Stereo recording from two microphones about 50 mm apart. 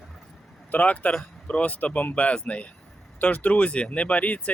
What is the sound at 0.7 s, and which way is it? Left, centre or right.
Speech, left.